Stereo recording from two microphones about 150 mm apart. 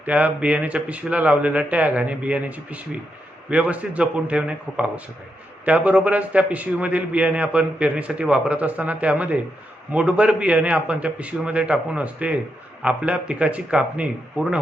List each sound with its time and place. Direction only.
0.0 s a man's voice: 10° right (ahead or behind)